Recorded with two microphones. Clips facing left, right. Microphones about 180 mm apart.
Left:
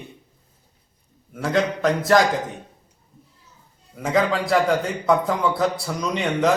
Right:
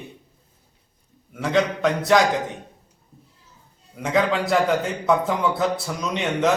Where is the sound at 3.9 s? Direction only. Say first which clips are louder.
Even; centre (ahead or behind).